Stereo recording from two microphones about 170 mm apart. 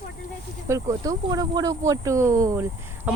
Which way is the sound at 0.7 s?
20° right (ahead or behind).